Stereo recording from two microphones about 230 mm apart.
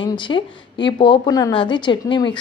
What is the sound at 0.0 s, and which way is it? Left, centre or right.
A woman's voice, left.